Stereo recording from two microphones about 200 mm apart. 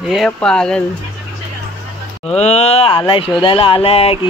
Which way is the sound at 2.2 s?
35° left (ahead or behind).